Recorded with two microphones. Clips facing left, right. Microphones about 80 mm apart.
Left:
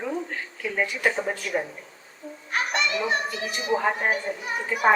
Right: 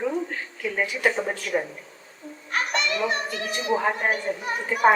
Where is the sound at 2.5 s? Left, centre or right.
Right.